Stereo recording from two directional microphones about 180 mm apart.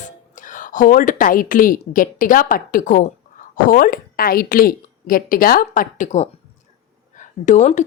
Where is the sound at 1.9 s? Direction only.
50° left (ahead or behind).